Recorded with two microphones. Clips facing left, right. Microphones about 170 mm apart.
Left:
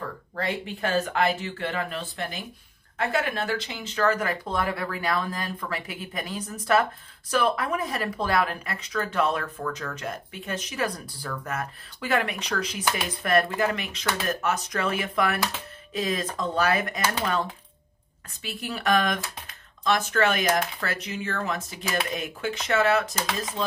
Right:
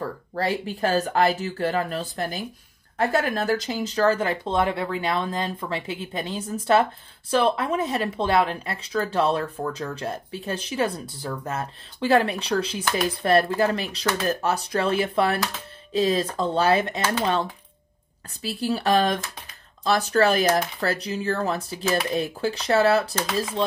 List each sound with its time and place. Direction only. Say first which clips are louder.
0.0 s speech: right 4 dB; 35° right (ahead or behind)